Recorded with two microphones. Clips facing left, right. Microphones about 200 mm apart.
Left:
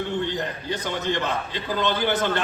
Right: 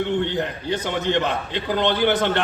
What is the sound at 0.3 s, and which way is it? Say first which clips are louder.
A man's voice: right 4 dB; 60° right (ahead or behind).